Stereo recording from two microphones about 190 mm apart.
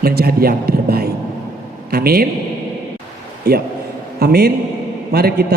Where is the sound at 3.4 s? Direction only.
60° right (ahead or behind).